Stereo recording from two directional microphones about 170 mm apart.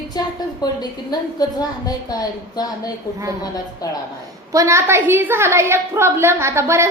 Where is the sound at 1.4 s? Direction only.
25° left (ahead or behind).